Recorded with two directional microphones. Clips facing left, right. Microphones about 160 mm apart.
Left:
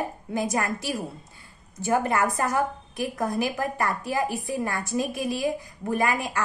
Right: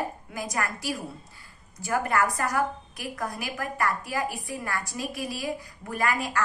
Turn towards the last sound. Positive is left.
turn(degrees=20)  # may be behind; listen again after turning